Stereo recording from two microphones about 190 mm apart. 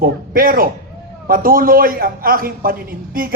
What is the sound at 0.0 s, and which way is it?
Music, 50° right (ahead or behind).